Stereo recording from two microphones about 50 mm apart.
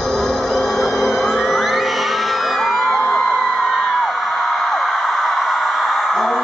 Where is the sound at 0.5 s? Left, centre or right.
Centre.